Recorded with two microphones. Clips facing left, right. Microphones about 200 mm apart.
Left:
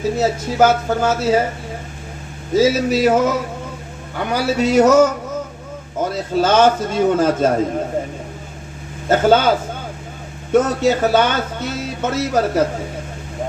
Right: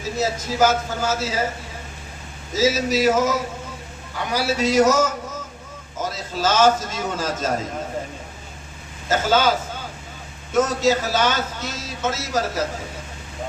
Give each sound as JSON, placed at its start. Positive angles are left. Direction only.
{"t": 0.2, "sound": "speech", "side_deg": 60}
{"t": 2.6, "sound": "speech", "side_deg": 55}
{"t": 9.0, "sound": "speech", "side_deg": 60}
{"t": 10.5, "sound": "speech", "side_deg": 60}